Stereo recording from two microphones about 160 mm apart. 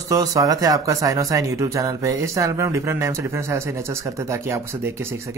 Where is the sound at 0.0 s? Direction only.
20° right (ahead or behind).